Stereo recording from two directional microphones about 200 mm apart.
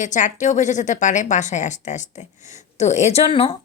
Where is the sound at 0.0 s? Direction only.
40° left (ahead or behind).